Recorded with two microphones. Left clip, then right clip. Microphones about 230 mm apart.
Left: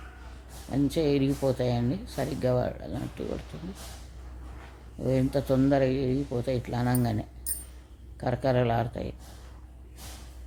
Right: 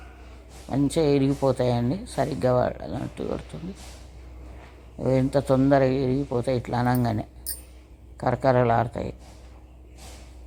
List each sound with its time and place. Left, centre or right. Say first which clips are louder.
0.7 s speech: right 4 dB; centre
5.0 s speech: right 5 dB; centre